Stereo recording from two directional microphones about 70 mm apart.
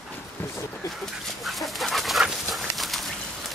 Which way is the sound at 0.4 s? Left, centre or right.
Left.